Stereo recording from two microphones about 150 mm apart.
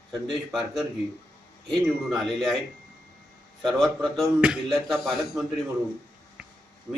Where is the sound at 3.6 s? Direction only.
Centre (ahead or behind).